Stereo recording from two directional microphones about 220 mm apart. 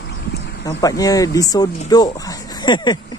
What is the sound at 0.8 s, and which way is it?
Speech, 15° left (ahead or behind).